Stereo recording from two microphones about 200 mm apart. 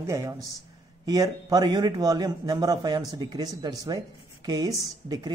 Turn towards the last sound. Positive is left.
turn(degrees=-20)  # may be behind; listen again after turning